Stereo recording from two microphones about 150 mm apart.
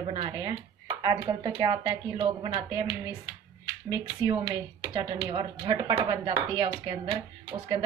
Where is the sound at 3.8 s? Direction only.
30° right (ahead or behind).